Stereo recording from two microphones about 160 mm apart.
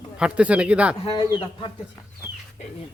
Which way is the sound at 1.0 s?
30° left (ahead or behind).